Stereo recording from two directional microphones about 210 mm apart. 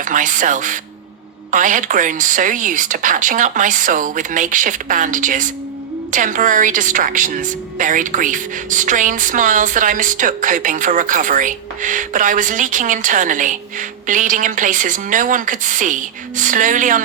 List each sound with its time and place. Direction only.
0.0 s a woman's voice: 40° right (ahead or behind)